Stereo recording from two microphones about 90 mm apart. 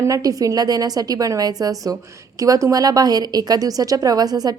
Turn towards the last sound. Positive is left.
turn(degrees=-45)  # may be behind; listen again after turning